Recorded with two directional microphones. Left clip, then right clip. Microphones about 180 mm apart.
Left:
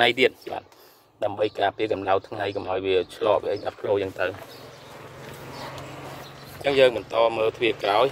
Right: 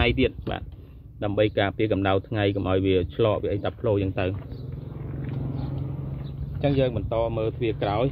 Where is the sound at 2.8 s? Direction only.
75° left (ahead or behind).